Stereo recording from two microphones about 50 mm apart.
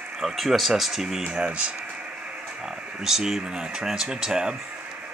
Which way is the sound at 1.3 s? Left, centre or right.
Right.